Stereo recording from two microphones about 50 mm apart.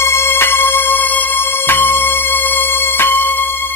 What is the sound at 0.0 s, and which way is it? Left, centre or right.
Music, left.